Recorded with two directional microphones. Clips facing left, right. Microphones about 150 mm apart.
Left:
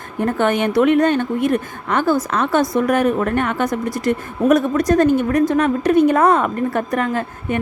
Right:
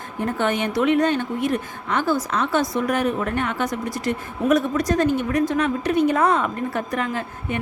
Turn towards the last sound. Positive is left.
turn(degrees=50)  # may be behind; listen again after turning